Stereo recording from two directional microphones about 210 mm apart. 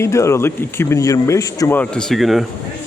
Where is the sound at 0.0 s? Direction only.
15° left (ahead or behind).